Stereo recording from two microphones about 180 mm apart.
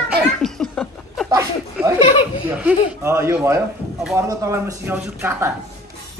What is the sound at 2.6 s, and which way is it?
Speech, 15° right (ahead or behind).